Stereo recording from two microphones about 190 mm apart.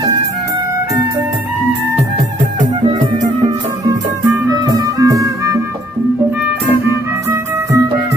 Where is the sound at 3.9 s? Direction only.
20° right (ahead or behind).